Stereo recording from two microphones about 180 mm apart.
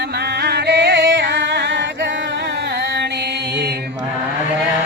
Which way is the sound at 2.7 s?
70° right (ahead or behind).